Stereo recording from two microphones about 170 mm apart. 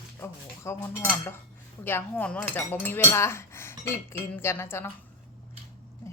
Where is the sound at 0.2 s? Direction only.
15° left (ahead or behind).